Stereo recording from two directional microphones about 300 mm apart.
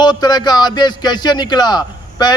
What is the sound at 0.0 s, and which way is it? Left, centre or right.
A man's voice, centre.